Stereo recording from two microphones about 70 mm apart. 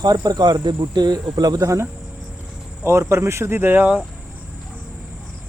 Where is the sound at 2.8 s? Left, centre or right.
Right.